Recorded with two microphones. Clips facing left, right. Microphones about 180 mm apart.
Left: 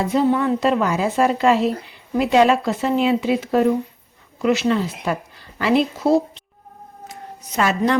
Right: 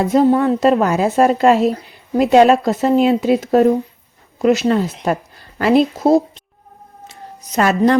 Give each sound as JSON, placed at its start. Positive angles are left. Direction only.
{"t": 0.1, "sound": "a woman's voice", "side_deg": -45}
{"t": 7.5, "sound": "a woman's voice", "side_deg": -45}